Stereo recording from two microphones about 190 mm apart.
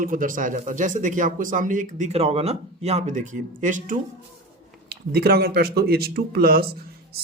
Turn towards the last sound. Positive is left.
turn(degrees=-55)  # may be behind; listen again after turning